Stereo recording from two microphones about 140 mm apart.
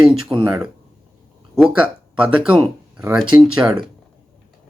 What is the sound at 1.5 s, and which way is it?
Speech, 5° right (ahead or behind).